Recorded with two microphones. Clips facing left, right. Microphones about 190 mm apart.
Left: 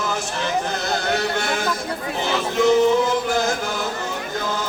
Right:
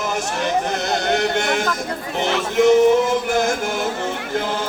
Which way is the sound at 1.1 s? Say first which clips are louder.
Right 4 dB; 20° right (ahead or behind).